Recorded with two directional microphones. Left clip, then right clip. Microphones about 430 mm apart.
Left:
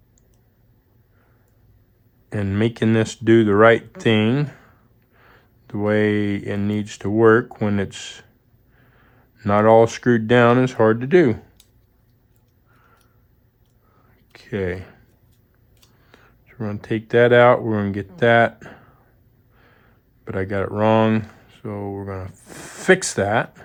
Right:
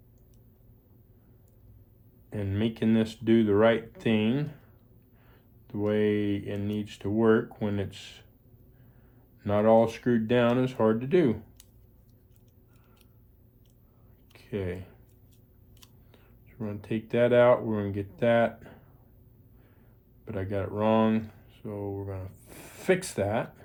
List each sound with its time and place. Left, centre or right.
2.3 s speech: centre
9.4 s speech: centre
14.3 s speech: centre
16.1 s speech: centre
20.2 s speech: centre